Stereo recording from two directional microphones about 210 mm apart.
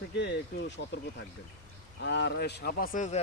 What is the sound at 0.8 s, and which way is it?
Speech, 55° left (ahead or behind).